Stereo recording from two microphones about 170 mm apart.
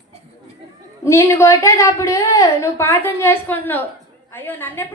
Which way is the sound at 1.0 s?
15° left (ahead or behind).